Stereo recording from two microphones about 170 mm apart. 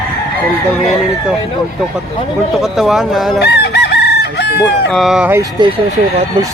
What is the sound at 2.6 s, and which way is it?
Speech, centre (ahead or behind).